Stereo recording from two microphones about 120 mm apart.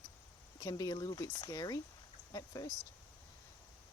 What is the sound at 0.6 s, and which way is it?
Speech, 30° left (ahead or behind).